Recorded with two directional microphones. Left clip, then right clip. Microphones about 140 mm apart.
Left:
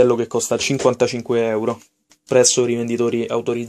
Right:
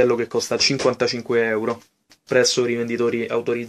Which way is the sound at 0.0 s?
35° left (ahead or behind).